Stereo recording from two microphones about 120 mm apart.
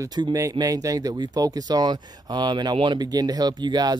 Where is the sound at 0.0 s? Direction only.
30° right (ahead or behind).